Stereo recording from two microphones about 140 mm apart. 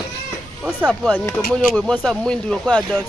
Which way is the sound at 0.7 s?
5° right (ahead or behind).